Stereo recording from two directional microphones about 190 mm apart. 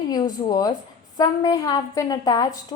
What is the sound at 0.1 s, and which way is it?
A woman's voice, 20° left (ahead or behind).